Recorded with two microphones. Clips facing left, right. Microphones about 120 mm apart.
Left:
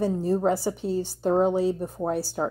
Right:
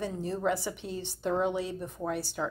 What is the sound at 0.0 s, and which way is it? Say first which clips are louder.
A woman's voice: left 8 dB; 35° left (ahead or behind).